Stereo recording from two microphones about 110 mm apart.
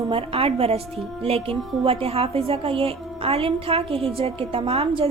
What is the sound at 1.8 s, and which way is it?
A woman's voice, 60° right (ahead or behind).